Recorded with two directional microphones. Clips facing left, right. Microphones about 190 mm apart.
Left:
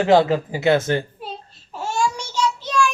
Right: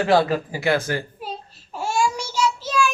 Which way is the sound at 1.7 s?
10° right (ahead or behind).